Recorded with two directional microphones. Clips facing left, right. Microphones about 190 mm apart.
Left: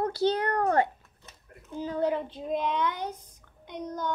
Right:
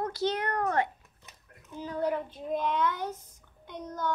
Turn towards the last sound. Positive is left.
turn(degrees=15)  # may be behind; listen again after turning